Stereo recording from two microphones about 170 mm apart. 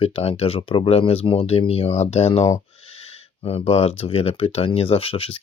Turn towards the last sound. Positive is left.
turn(degrees=35)  # may be behind; listen again after turning